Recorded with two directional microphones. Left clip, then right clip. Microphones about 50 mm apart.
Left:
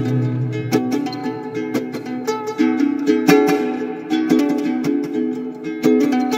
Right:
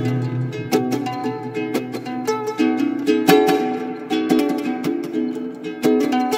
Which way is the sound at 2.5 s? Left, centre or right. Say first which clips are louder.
Left 2 dB; left.